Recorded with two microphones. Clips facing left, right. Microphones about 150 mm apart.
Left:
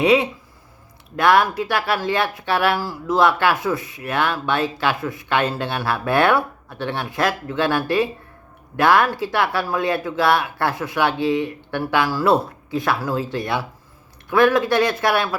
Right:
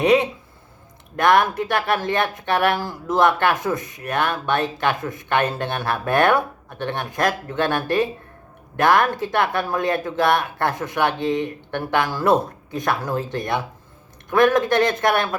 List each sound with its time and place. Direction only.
0.0 s speech: 45° right (ahead or behind)
2.7 s a man's voice: 20° right (ahead or behind)
3.2 s speech: 50° right (ahead or behind)